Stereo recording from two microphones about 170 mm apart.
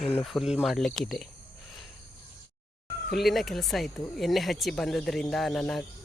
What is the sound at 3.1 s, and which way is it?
Speech, centre (ahead or behind).